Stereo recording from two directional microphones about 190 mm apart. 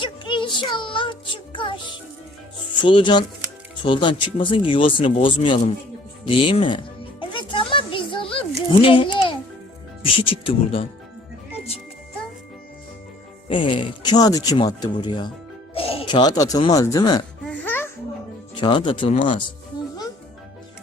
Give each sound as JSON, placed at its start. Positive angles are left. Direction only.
{"t": 0.0, "sound": "child singing", "side_deg": 25}
{"t": 1.5, "sound": "speech", "side_deg": 25}
{"t": 6.2, "sound": "music", "side_deg": 25}
{"t": 10.0, "sound": "speech", "side_deg": 30}
{"t": 13.5, "sound": "speech", "side_deg": 25}
{"t": 17.4, "sound": "laughter", "side_deg": 10}
{"t": 18.5, "sound": "speech", "side_deg": 25}